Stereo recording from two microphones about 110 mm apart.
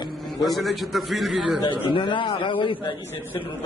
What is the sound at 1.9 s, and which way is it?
Speech, 50° left (ahead or behind).